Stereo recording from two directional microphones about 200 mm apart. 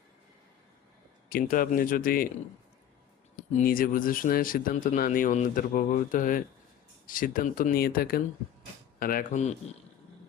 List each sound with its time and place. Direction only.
1.3 s speech: 45° left (ahead or behind)
3.6 s speech: 45° left (ahead or behind)